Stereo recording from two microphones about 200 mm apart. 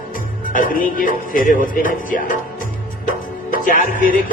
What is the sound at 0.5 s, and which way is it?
A man's voice, 45° left (ahead or behind).